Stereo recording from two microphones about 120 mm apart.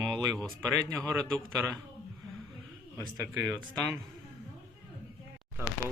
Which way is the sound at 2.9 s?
25° right (ahead or behind).